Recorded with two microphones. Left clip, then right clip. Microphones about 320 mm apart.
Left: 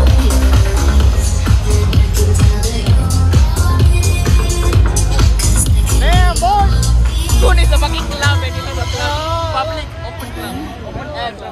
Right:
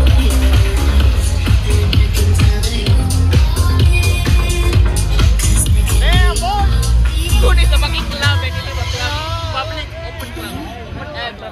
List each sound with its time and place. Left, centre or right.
5.1 s music: centre
6.0 s music: left